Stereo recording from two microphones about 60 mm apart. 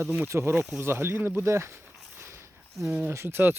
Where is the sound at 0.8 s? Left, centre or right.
Right.